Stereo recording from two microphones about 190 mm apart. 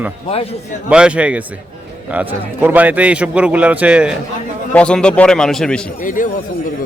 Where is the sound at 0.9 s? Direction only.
5° right (ahead or behind).